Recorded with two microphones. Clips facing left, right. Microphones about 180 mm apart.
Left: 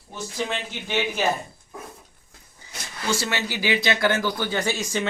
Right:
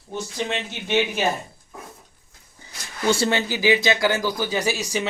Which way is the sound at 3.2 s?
30° right (ahead or behind).